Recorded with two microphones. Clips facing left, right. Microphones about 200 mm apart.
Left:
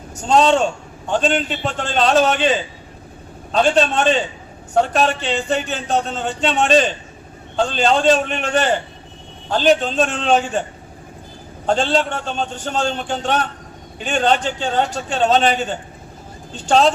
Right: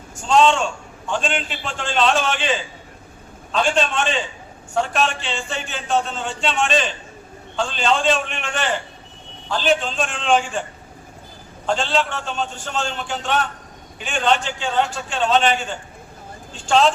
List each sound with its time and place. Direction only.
0.2 s a man's voice: 40° left (ahead or behind)
11.7 s a man's voice: 40° left (ahead or behind)